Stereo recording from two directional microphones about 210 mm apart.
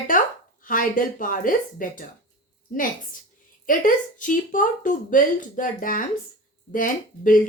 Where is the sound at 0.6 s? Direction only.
40° left (ahead or behind).